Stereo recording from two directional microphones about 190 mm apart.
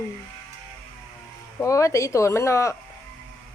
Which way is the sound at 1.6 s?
15° left (ahead or behind).